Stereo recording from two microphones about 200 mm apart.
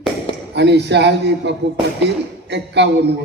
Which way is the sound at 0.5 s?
60° right (ahead or behind).